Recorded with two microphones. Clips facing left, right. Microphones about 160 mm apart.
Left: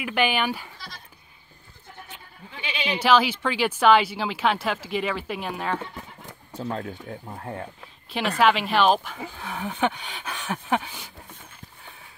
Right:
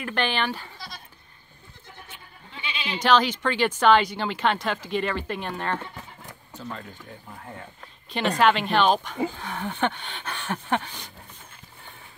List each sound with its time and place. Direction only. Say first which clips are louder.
0.0 s speech: left 2 dB; 10° left (ahead or behind)
2.6 s bleat: left 4 dB; 75° left (ahead or behind)
3.0 s speech: even; 5° left (ahead or behind)
6.6 s speech: left 7 dB; 65° left (ahead or behind)
8.1 s speech: even; 5° left (ahead or behind)